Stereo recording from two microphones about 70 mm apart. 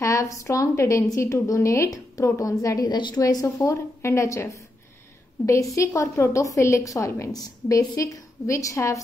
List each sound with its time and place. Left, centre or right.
0.0 s a woman's voice: left
2.8 s a woman's voice: left
3.2 s speech: left
3.4 s a woman's voice: left